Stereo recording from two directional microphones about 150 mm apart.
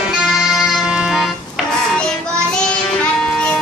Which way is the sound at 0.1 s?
5° right (ahead or behind).